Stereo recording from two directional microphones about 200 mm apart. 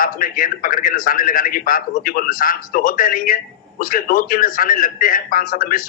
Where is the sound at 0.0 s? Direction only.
45° left (ahead or behind).